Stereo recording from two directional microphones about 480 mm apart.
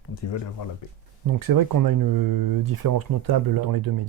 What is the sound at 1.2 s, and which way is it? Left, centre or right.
Speech, right.